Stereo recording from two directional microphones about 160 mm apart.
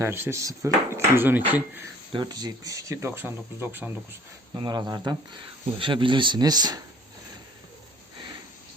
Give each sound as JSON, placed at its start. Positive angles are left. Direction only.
{"t": 0.0, "sound": "speech", "side_deg": -15}
{"t": 2.1, "sound": "speech", "side_deg": -25}
{"t": 4.5, "sound": "speech", "side_deg": -25}